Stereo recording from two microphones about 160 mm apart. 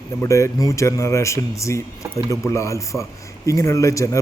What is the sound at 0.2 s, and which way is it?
A man's voice, 20° left (ahead or behind).